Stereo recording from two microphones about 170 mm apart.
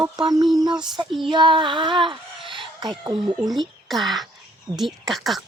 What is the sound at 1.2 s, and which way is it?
Speech, 30° right (ahead or behind).